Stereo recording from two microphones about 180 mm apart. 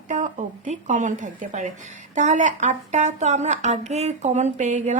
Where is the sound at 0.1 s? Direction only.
40° right (ahead or behind).